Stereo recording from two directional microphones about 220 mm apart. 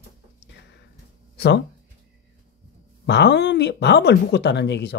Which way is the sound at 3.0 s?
50° left (ahead or behind).